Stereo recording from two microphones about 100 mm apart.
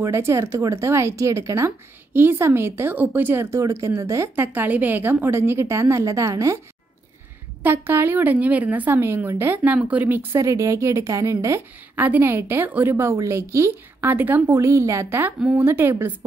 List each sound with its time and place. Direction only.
0.0 s speech: 25° right (ahead or behind)
7.6 s speech: 20° right (ahead or behind)
9.6 s speech: 10° right (ahead or behind)
14.5 s speech: 30° right (ahead or behind)